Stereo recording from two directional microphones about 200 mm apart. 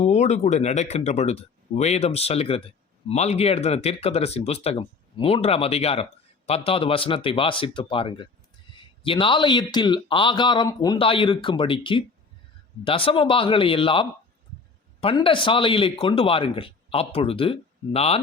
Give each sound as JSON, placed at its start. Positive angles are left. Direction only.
{"t": 0.0, "sound": "speech", "side_deg": 35}